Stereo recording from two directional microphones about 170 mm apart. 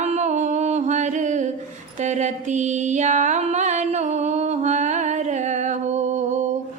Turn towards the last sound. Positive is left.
turn(degrees=-45)  # may be behind; listen again after turning